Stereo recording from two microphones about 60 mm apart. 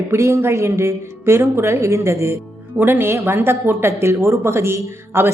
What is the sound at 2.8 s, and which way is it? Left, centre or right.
Speech, right.